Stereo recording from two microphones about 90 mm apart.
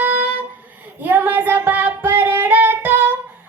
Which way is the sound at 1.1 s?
20° right (ahead or behind).